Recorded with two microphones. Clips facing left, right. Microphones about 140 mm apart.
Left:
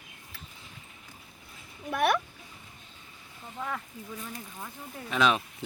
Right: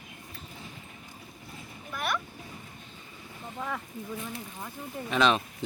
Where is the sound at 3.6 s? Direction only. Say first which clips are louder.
Even; 5° right (ahead or behind).